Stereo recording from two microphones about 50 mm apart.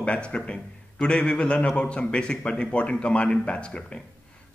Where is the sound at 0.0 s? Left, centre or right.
Left.